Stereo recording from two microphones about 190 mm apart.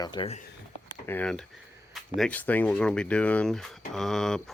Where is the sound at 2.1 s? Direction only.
5° left (ahead or behind).